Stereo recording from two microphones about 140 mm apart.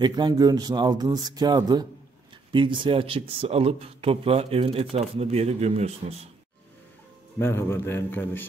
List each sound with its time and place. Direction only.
0.0 s speech: 30° right (ahead or behind); by 6.1 s 50° right (ahead or behind)
7.3 s a man's voice: 15° left (ahead or behind)